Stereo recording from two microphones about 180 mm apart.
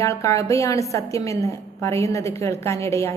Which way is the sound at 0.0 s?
15° left (ahead or behind).